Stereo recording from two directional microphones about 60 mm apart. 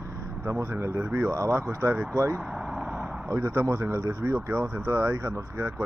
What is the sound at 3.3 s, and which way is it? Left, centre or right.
Speech, right.